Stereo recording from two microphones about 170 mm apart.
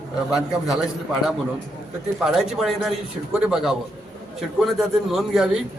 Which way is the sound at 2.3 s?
Centre (ahead or behind).